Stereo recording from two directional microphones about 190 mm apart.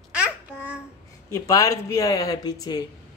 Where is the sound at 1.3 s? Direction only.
20° left (ahead or behind).